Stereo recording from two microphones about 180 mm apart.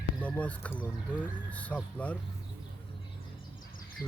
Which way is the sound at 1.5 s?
10° left (ahead or behind).